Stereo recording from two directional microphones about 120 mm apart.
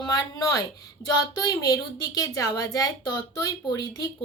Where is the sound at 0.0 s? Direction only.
35° left (ahead or behind).